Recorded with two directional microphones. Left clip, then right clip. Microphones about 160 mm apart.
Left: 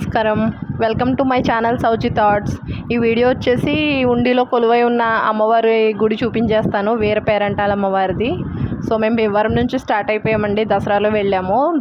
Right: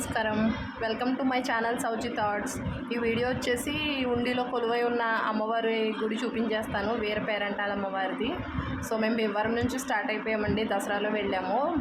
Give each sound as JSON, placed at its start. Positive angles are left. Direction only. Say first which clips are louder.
{"t": 0.1, "sound": "speech", "louder": "left 12 dB", "side_deg": 55}